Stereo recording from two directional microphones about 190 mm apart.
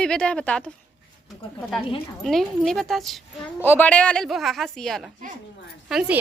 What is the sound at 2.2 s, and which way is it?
A woman's voice, centre (ahead or behind).